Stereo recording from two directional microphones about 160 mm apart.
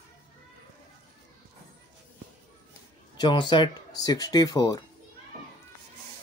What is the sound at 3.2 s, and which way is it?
Speech, 30° left (ahead or behind).